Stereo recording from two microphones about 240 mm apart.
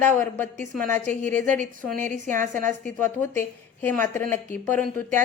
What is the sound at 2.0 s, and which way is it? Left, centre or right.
Speech, right.